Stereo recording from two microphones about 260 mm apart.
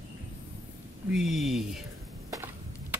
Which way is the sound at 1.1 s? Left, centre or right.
Centre.